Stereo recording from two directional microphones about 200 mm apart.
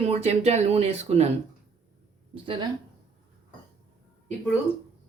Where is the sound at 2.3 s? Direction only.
25° right (ahead or behind).